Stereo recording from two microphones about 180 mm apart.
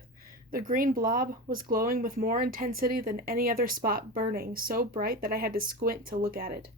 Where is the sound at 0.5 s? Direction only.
50° right (ahead or behind).